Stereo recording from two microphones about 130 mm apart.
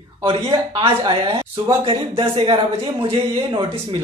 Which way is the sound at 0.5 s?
45° right (ahead or behind).